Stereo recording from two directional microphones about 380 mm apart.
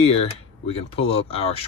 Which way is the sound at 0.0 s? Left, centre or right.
Centre.